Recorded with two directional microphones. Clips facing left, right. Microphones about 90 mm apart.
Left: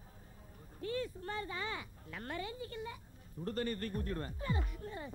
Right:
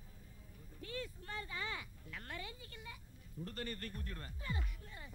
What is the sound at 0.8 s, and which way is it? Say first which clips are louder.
Speech: left 7 dB; 35° left (ahead or behind).